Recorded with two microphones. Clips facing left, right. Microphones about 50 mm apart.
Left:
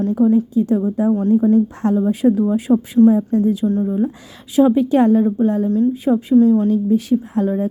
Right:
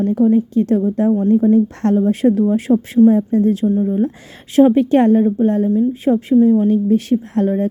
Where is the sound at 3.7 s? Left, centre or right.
Right.